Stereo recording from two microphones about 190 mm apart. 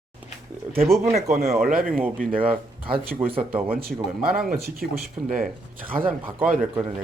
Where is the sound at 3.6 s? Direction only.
50° right (ahead or behind).